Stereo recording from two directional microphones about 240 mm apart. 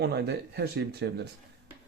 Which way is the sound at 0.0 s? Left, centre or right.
Right.